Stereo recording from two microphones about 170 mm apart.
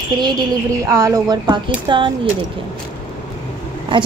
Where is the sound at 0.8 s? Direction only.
15° right (ahead or behind).